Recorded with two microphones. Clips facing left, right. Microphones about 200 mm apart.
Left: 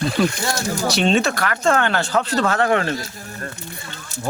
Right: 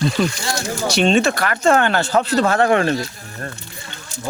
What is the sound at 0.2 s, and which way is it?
Speech, centre (ahead or behind).